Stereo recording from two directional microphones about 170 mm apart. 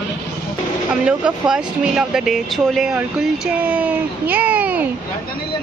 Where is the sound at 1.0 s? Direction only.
5° right (ahead or behind).